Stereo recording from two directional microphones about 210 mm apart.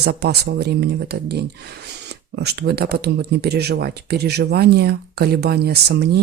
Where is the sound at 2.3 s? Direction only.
50° right (ahead or behind).